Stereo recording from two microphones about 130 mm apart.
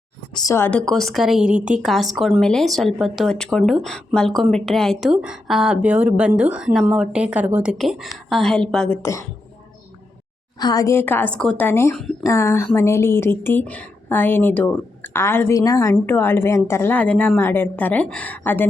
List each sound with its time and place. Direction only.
0.3 s speech: 25° left (ahead or behind); by 9.0 s 5° left (ahead or behind)
9.0 s speech: 20° left (ahead or behind)
10.6 s a woman's voice: 30° left (ahead or behind); by 18.6 s 15° left (ahead or behind)